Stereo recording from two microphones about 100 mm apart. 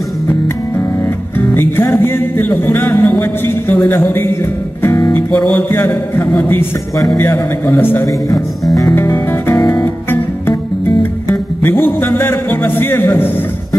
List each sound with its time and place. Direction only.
1.5 s music: 25° left (ahead or behind)
5.6 s music: 20° left (ahead or behind)